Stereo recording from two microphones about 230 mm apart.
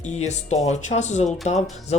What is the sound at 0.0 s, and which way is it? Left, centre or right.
Speech, left.